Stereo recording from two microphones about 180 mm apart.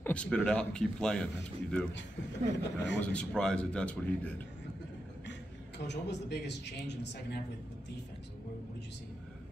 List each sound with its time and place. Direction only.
0.0 s speech: 5° left (ahead or behind)
2.6 s a man's voice: 80° left
3.0 s speech: 5° left (ahead or behind)
5.9 s a man's voice: 70° left (ahead or behind)